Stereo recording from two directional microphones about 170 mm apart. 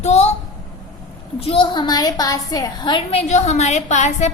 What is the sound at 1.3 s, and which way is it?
A woman's voice, 35° left (ahead or behind).